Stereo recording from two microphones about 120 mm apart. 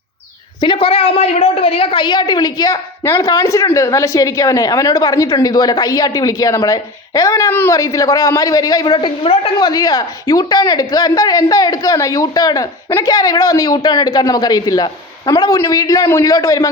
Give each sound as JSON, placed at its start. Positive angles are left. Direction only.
{"t": 0.6, "sound": "a woman's voice", "side_deg": 50}
{"t": 9.2, "sound": "a woman's voice", "side_deg": 55}
{"t": 9.6, "sound": "a woman's voice", "side_deg": 35}